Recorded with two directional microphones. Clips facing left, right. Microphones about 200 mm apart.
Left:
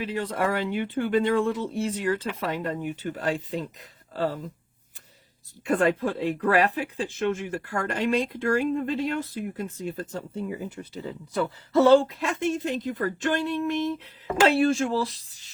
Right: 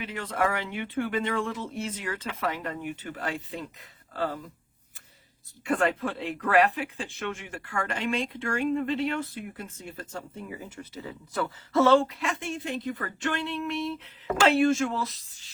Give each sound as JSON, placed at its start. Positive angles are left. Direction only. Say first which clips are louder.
{"t": 0.0, "sound": "speech", "louder": "left 2 dB", "side_deg": 35}
{"t": 4.1, "sound": "speech", "louder": "left 3 dB", "side_deg": 25}
{"t": 5.7, "sound": "speech", "louder": "left 4 dB", "side_deg": 40}